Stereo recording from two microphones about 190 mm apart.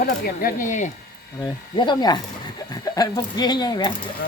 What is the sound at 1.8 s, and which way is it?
Speech, 25° left (ahead or behind).